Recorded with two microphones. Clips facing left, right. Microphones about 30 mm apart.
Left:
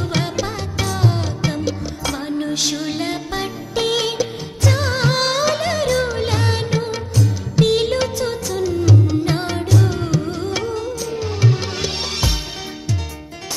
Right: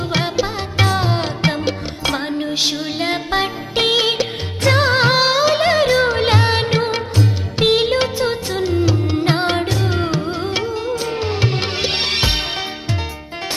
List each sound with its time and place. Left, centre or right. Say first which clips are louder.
0.1 s music: right 5 dB; right
0.8 s music: right 1 dB; right
3.1 s music: right 5 dB; right
5.2 s music: right 4 dB; right
7.7 s music: right 2 dB; right
11.1 s music: right 1 dB; right